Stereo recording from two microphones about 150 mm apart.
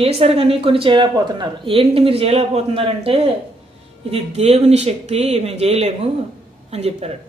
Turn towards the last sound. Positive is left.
turn(degrees=-45)  # may be behind; listen again after turning